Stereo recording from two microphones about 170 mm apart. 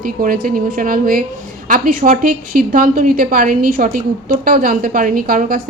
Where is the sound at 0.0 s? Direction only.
55° right (ahead or behind).